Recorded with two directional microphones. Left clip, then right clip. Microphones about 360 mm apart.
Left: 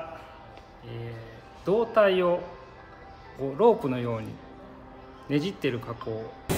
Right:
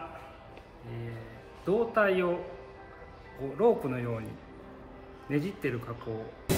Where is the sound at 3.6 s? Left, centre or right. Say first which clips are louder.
Left 4 dB; left.